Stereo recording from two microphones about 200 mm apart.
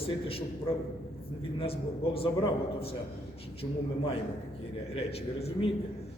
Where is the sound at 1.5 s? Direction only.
30° left (ahead or behind).